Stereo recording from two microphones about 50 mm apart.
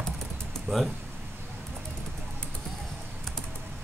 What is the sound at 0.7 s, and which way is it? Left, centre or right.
Speech, right.